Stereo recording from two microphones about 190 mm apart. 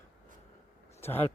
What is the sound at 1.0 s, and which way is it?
Speech, 10° left (ahead or behind).